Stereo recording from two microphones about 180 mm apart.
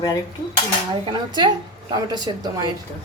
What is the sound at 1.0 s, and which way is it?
Speech, 25° right (ahead or behind).